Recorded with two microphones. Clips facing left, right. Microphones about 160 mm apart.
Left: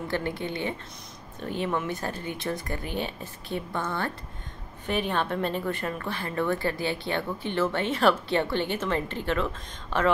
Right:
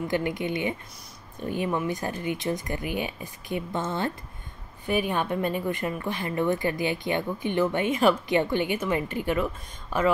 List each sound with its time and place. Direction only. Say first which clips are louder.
0.1 s a woman's voice: right 2 dB; 15° right (ahead or behind)